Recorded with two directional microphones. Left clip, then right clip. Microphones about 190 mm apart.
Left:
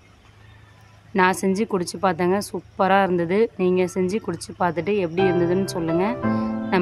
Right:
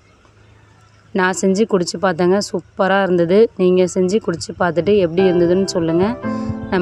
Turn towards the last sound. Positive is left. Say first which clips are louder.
# right 2 dB
turn(degrees=-20)  # may be behind; listen again after turning